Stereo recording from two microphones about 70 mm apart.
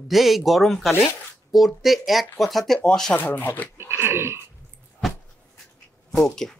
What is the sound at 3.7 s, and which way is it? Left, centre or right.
Speech, right.